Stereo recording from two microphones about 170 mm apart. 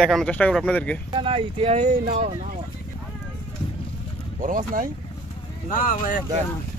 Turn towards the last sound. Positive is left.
turn(degrees=50)  # may be behind; listen again after turning